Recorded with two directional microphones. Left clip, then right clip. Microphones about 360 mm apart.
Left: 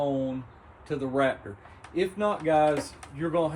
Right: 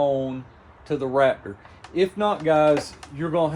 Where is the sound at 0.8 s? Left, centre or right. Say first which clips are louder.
Right 6 dB; centre.